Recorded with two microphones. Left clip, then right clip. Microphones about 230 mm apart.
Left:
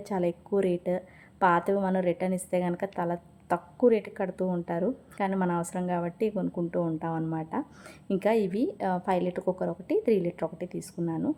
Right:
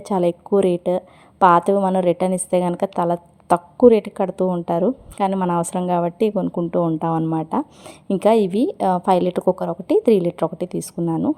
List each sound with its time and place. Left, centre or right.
0.0 s a woman's voice: right